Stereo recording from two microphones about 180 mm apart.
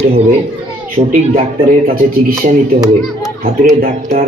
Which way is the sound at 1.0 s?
35° right (ahead or behind).